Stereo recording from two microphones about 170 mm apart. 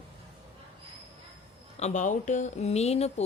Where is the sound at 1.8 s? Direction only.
45° left (ahead or behind).